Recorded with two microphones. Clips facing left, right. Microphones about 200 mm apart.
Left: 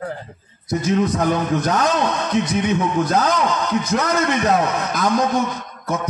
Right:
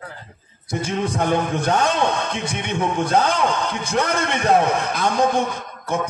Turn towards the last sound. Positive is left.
turn(degrees=-30)  # may be behind; listen again after turning